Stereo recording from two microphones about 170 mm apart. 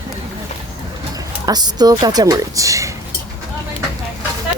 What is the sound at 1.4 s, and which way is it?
A woman's voice, 25° right (ahead or behind).